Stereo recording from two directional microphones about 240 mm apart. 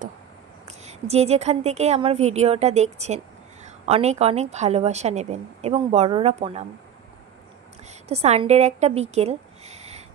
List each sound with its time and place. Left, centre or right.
0.7 s a woman's voice: right
8.1 s speech: right